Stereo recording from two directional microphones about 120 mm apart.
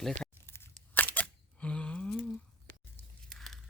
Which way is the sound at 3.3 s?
Centre (ahead or behind).